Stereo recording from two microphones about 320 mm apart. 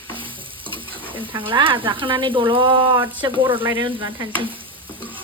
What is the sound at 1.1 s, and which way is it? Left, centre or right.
Frying, centre.